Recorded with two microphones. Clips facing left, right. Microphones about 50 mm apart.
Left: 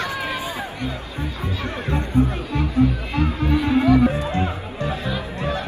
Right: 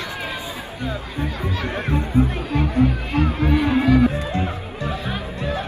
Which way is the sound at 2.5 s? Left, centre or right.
Right.